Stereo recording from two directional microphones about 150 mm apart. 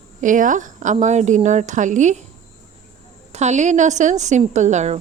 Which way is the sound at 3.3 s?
50° right (ahead or behind).